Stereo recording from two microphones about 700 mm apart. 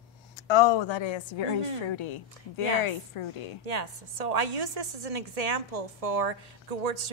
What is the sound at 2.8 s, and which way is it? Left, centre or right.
Speech, left.